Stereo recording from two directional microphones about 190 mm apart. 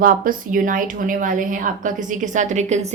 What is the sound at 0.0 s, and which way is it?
A woman's voice, 45° right (ahead or behind).